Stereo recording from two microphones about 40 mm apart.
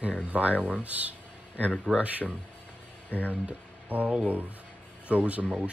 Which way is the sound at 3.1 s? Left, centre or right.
Left.